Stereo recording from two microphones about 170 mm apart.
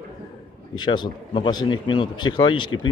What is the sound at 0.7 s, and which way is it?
Speech, 25° left (ahead or behind).